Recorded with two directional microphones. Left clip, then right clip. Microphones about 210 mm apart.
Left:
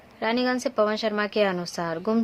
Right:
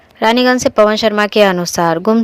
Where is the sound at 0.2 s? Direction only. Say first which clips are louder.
Right 14 dB; 40° right (ahead or behind).